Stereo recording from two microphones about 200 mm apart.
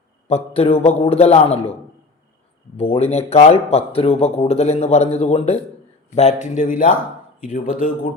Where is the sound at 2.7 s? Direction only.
30° left (ahead or behind).